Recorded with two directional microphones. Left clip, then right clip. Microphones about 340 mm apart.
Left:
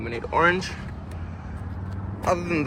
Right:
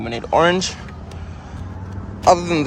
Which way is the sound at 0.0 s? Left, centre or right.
Centre.